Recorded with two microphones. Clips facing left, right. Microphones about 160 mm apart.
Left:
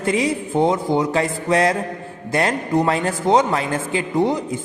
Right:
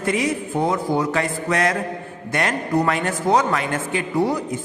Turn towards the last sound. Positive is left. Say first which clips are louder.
# left 2 dB
turn(degrees=20)  # may be behind; listen again after turning